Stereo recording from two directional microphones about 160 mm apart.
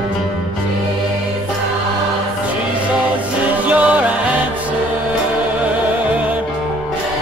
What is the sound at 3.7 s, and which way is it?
Music, 10° right (ahead or behind).